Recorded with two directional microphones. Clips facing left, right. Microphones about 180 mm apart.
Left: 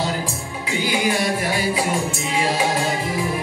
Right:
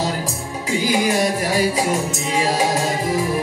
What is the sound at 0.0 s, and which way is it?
Music, 40° right (ahead or behind).